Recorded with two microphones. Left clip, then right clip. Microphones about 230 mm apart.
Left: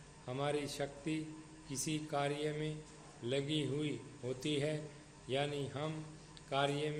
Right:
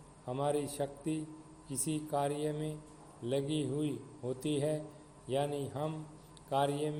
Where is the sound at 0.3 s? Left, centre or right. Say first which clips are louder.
Right 4 dB; right.